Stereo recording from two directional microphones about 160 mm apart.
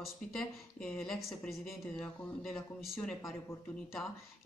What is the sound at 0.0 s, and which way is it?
Speech, 5° left (ahead or behind).